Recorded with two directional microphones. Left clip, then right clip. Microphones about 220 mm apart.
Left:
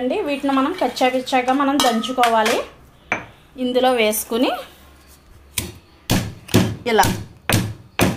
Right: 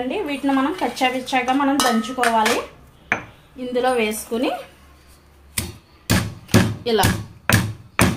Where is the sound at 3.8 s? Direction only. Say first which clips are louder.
Left 3 dB; 45° left (ahead or behind).